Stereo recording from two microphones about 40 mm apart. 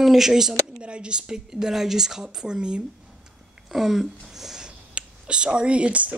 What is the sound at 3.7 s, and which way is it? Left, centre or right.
Speech, centre.